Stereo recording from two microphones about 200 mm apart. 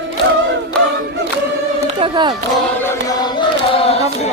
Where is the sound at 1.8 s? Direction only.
25° right (ahead or behind).